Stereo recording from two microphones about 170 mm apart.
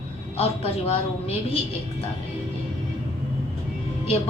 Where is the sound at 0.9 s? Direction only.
35° left (ahead or behind).